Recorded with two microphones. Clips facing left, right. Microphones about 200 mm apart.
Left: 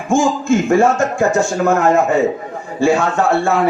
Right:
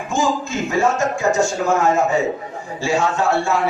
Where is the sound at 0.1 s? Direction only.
50° left (ahead or behind).